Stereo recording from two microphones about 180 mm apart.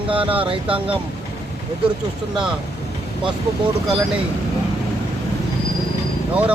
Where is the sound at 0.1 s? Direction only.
30° right (ahead or behind).